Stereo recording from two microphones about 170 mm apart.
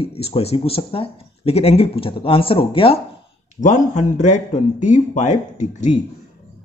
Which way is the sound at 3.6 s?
45° left (ahead or behind).